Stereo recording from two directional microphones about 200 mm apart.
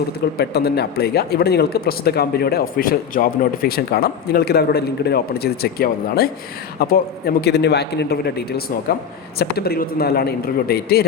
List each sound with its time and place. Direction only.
0.3 s a man's voice: 55° left (ahead or behind)